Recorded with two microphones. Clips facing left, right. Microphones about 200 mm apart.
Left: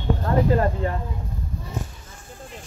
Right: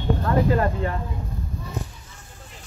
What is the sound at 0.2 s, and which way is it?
Speech, 30° left (ahead or behind).